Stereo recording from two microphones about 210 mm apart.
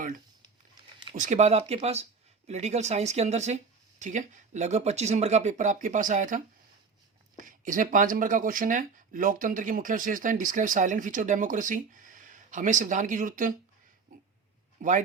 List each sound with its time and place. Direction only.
1.1 s speech: 35° right (ahead or behind)
14.8 s speech: 35° right (ahead or behind)